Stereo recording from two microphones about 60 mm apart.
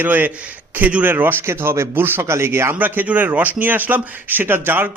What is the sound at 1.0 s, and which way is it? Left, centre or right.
A man's voice, right.